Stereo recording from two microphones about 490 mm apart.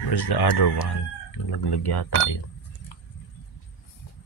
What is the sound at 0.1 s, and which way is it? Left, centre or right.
Speech, left.